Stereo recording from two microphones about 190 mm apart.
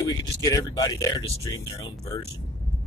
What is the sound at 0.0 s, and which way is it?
Speech, 20° left (ahead or behind).